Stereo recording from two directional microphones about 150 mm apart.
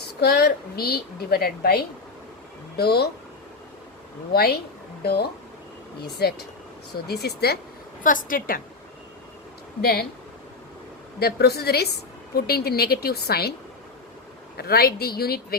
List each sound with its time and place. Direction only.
0.2 s a woman's voice: 90° left
4.3 s a woman's voice: 90° left
8.0 s a woman's voice: 65° left (ahead or behind)
9.8 s a woman's voice: 90° left
11.2 s a woman's voice: 90° left
14.5 s a woman's voice: 90° left